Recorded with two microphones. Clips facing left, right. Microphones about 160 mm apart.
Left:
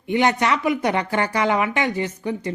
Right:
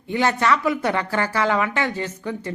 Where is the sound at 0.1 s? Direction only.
20° left (ahead or behind).